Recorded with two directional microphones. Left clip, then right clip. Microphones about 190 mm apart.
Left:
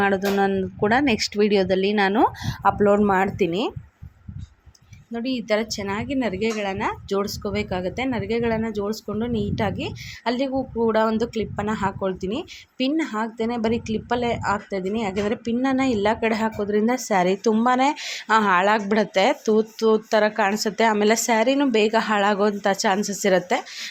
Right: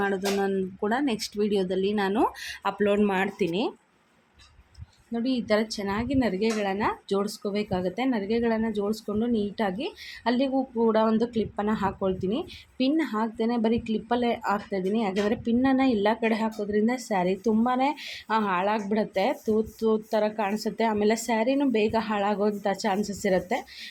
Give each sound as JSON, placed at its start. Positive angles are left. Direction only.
{"t": 0.0, "sound": "a woman's voice", "side_deg": 20}
{"t": 5.1, "sound": "a woman's voice", "side_deg": 10}